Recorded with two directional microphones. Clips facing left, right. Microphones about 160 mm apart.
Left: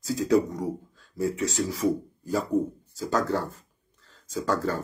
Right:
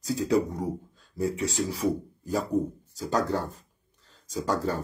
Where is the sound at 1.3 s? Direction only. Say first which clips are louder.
Left 1 dB; 35° right (ahead or behind).